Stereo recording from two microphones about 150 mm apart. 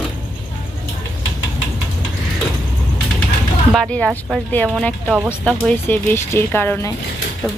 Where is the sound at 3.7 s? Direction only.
5° left (ahead or behind).